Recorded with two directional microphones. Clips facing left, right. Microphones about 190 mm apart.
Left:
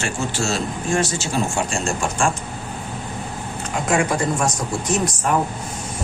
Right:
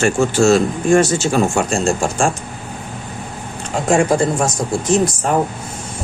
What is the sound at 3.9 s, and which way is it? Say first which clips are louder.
Speech: right 6 dB; 30° right (ahead or behind).